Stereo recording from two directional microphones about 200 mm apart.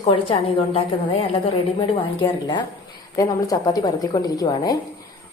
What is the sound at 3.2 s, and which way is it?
A woman's voice, 20° left (ahead or behind).